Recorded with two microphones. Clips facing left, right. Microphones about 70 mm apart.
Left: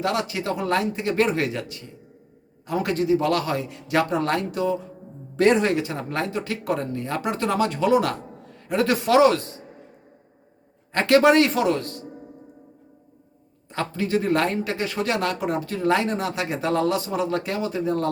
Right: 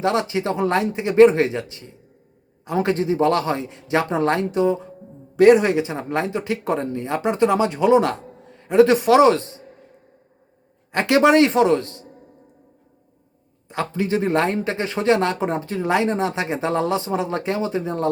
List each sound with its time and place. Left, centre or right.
0.0 s a man's voice: right
10.9 s a man's voice: centre
13.7 s a man's voice: centre